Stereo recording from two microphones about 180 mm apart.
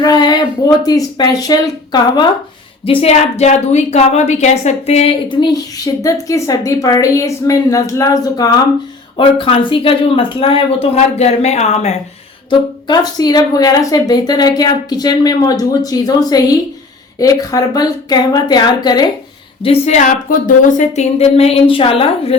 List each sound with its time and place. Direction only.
0.0 s speech: 20° left (ahead or behind)
2.8 s a woman's voice: 30° left (ahead or behind)
12.5 s a woman's voice: 20° left (ahead or behind)
19.6 s a man's voice: 35° left (ahead or behind)